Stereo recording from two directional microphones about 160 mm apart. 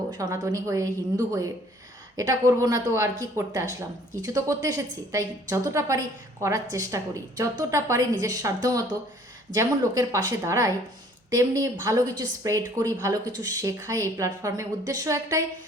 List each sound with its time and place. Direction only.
0.1 s a woman's voice: 20° right (ahead or behind)